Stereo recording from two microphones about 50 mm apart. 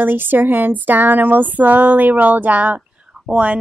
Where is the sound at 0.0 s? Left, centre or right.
Right.